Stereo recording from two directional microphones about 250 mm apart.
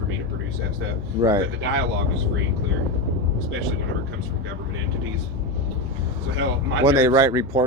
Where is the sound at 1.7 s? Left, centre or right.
Right.